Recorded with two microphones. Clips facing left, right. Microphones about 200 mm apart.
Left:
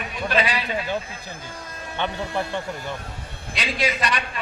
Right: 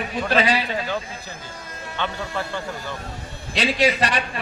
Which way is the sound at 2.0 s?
20° left (ahead or behind).